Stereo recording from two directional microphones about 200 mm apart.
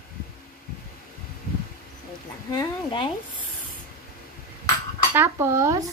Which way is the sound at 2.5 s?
25° left (ahead or behind).